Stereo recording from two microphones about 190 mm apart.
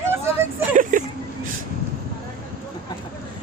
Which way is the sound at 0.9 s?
45° right (ahead or behind).